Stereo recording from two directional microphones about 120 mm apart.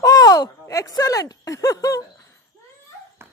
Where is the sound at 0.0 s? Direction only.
30° left (ahead or behind).